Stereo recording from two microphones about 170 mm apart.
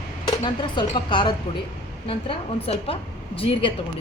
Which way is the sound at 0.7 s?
25° left (ahead or behind).